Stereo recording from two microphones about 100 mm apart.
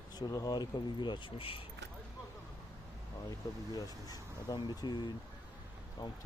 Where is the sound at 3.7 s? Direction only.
40° left (ahead or behind).